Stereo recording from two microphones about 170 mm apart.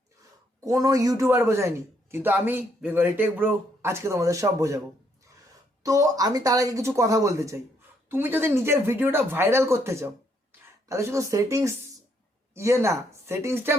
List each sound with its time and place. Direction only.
0.6 s a man's voice: 20° right (ahead or behind)
5.8 s a man's voice: 20° right (ahead or behind)